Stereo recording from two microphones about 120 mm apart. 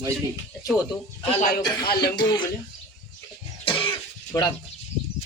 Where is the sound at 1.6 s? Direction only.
35° left (ahead or behind).